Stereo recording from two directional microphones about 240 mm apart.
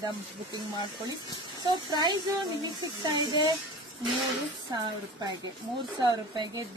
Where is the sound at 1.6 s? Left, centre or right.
Centre.